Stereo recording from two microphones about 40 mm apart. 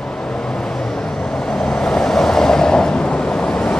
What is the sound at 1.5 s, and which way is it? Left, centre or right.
Vehicle, centre.